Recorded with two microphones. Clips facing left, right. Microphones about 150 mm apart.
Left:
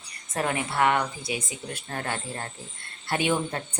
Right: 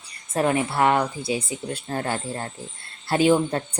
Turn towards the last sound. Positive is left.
turn(degrees=-30)  # may be behind; listen again after turning